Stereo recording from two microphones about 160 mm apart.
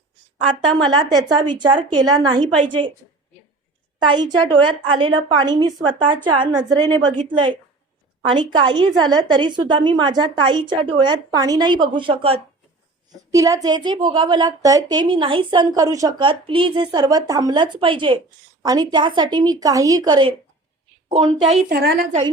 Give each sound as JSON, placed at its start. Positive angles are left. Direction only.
{"t": 0.9, "sound": "a woman's voice", "side_deg": -25}
{"t": 4.0, "sound": "a woman's voice", "side_deg": -30}
{"t": 13.3, "sound": "a woman's voice", "side_deg": -20}
{"t": 21.7, "sound": "a woman's voice", "side_deg": -75}